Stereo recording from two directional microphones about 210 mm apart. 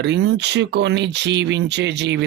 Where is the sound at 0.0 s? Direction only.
55° right (ahead or behind).